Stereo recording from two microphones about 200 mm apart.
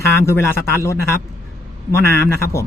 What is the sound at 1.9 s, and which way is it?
Speech, 15° left (ahead or behind).